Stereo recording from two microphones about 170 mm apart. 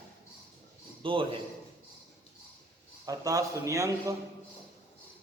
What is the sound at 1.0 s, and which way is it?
Speech, 30° right (ahead or behind).